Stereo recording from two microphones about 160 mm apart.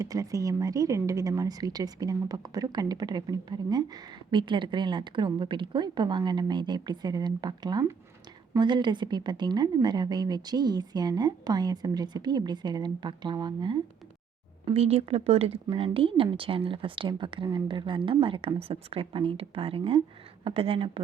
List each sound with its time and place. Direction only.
0.0 s speech: 20° right (ahead or behind)
14.6 s speech: 40° right (ahead or behind)